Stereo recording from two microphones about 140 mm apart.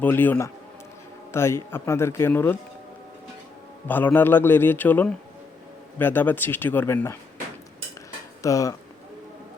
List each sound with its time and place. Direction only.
0.0 s a man's voice: 15° left (ahead or behind)
3.8 s a man's voice: 15° left (ahead or behind)
8.4 s speech: 25° left (ahead or behind)